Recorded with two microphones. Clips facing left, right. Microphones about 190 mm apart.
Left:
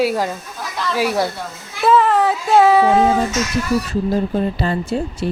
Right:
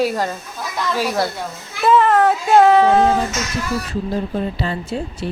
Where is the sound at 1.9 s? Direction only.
Centre (ahead or behind).